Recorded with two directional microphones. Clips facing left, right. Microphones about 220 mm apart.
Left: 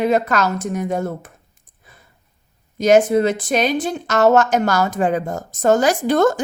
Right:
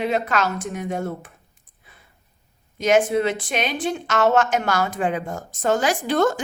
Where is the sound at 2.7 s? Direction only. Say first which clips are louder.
Left 5 dB; 40° left (ahead or behind).